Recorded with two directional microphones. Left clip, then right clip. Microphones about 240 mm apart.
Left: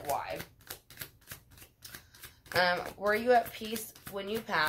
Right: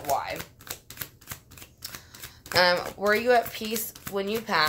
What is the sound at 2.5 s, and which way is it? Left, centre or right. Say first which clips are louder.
Speech: right 7 dB; right.